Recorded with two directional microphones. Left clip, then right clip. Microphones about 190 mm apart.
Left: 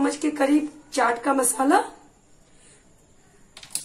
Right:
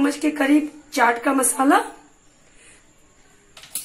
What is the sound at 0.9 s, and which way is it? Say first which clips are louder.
Speech: right 3 dB; 30° right (ahead or behind).